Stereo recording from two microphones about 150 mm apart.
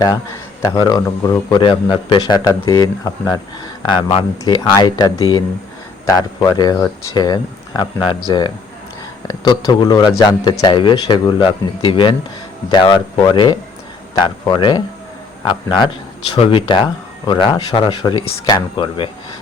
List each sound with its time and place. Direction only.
0.6 s speech: 25° left (ahead or behind)
16.4 s speech: 35° left (ahead or behind)